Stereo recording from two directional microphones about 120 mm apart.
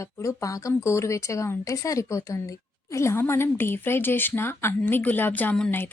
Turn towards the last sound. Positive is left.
turn(degrees=15)  # may be behind; listen again after turning